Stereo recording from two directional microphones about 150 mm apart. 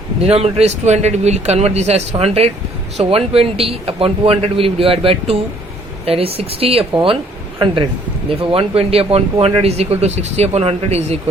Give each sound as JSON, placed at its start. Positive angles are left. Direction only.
{"t": 0.2, "sound": "a man's voice", "side_deg": -45}
{"t": 8.4, "sound": "speech", "side_deg": -40}